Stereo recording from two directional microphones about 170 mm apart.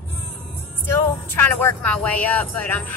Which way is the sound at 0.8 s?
10° left (ahead or behind).